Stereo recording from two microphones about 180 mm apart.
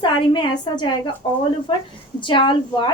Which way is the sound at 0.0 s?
25° left (ahead or behind).